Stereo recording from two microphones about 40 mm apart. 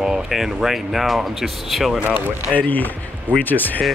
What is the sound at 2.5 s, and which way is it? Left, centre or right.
Speech, left.